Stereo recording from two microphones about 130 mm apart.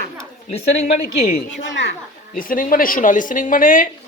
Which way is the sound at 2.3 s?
90° left.